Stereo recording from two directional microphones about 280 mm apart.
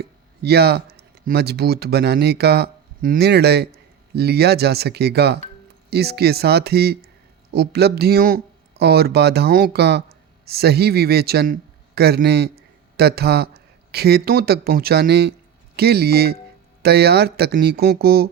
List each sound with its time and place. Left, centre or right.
0.0 s a man's voice: right